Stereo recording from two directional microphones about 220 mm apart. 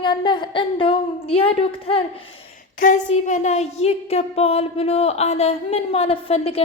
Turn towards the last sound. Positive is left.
turn(degrees=25)  # may be behind; listen again after turning